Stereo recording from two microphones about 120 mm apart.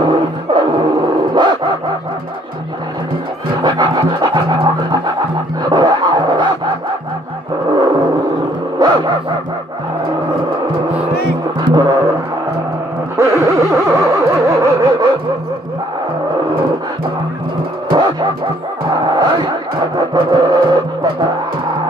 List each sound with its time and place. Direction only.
0.0 s a sound: 40° right (ahead or behind)
3.6 s music: 40° right (ahead or behind)
8.8 s dog: 35° right (ahead or behind)
11.6 s music: 35° right (ahead or behind)
13.1 s a sound: 25° right (ahead or behind)
17.9 s music: 40° right (ahead or behind)